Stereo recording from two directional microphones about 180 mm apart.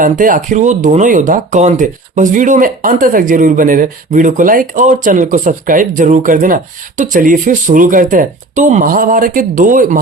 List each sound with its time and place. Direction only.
0.0 s speech: 50° right (ahead or behind)